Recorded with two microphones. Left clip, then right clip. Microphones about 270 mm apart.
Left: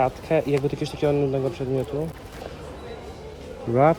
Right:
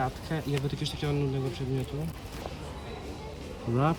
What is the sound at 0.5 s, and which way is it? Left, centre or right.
Speech, centre.